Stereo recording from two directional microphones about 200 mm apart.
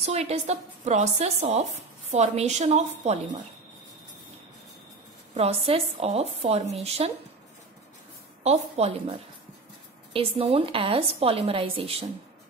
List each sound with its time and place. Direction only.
0.0 s a woman's voice: 30° right (ahead or behind)
5.3 s a woman's voice: 30° right (ahead or behind)
8.5 s a woman's voice: 30° right (ahead or behind)
10.1 s a woman's voice: 30° right (ahead or behind)